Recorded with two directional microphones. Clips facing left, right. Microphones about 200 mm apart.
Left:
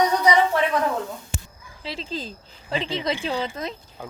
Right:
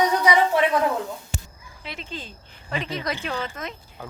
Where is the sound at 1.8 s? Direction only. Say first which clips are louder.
Left 5 dB; 35° left (ahead or behind).